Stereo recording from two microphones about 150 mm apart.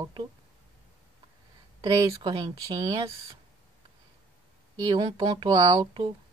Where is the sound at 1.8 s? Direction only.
25° right (ahead or behind).